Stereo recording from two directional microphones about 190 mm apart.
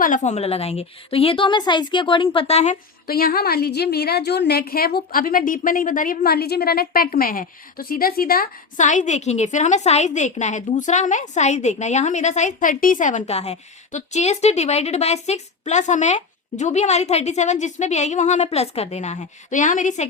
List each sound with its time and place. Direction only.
0.0 s a woman's voice: 40° left (ahead or behind)
3.1 s a woman's voice: 50° left (ahead or behind)